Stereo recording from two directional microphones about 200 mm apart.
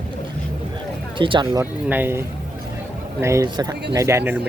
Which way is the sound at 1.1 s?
25° right (ahead or behind).